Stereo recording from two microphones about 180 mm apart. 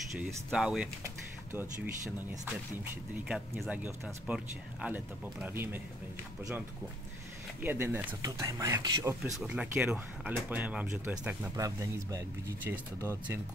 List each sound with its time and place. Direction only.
0.5 s speech: 5° right (ahead or behind)
3.3 s speech: 5° right (ahead or behind)
7.6 s speech: 10° right (ahead or behind)